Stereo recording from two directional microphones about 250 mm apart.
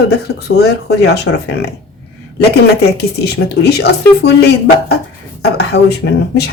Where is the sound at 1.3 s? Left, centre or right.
Left.